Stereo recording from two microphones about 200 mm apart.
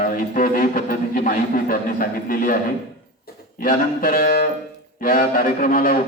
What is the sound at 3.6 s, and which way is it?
A man's voice, 45° left (ahead or behind).